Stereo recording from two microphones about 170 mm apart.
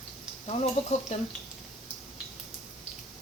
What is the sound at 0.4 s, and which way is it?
Speech, 40° left (ahead or behind).